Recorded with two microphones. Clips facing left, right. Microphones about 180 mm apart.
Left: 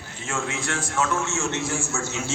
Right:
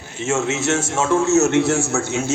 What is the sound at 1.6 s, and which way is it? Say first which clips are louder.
Speech: right 10 dB; 75° right (ahead or behind).